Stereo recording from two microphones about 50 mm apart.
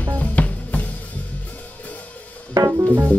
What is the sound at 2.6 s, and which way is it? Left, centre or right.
Music, right.